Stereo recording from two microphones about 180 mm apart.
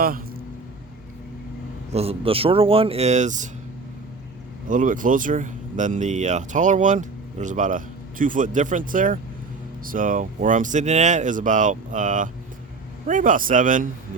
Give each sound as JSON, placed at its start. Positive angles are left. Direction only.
{"t": 0.0, "sound": "speech", "side_deg": -55}
{"t": 1.9, "sound": "speech", "side_deg": -35}
{"t": 4.7, "sound": "speech", "side_deg": -45}